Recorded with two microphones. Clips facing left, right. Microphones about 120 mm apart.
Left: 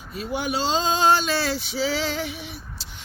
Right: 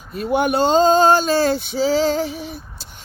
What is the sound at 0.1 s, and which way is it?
Female singing, 55° right (ahead or behind).